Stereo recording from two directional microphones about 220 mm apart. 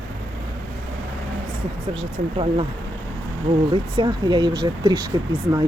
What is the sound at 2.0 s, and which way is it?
Speech, 25° right (ahead or behind).